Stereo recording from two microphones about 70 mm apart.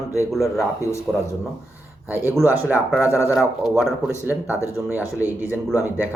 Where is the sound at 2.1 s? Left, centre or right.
Right.